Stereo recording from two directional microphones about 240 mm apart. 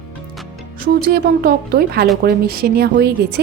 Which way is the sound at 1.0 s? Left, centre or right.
Right.